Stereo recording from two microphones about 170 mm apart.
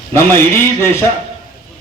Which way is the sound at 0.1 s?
15° left (ahead or behind).